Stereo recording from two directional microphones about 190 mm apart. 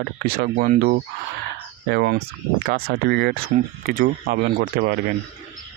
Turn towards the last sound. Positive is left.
turn(degrees=-55)  # may be behind; listen again after turning